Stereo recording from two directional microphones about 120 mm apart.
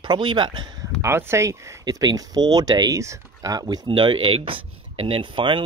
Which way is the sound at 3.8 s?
45° right (ahead or behind).